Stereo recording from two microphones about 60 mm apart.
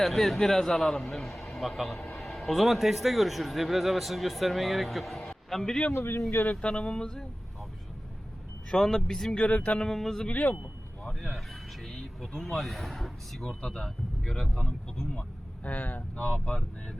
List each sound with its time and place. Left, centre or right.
0.0 s a man's voice: centre
5.9 s a man's voice: left
6.4 s speech: centre
8.7 s speech: centre
9.3 s speech: left
9.8 s speech: centre
10.2 s speech: left
11.3 s a man's voice: centre
15.6 s speech: left